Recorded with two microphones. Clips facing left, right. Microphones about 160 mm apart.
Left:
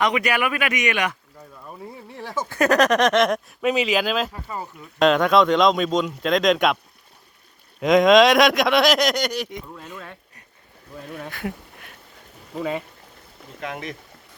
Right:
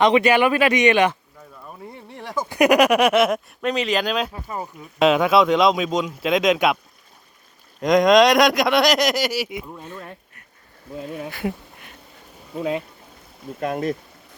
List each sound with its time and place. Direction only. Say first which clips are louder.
0.0 s speech: right 6 dB; 30° right (ahead or behind)
1.6 s speech: left 1 dB; centre (ahead or behind)
2.5 s speech: right 3 dB; 15° right (ahead or behind); by 4.3 s centre (ahead or behind)
4.4 s speech: right 2 dB; 15° right (ahead or behind)
4.9 s speech: right 1 dB; 5° right (ahead or behind)
7.8 s speech: even; centre (ahead or behind)
11.2 s speech: right 2 dB; 5° right (ahead or behind)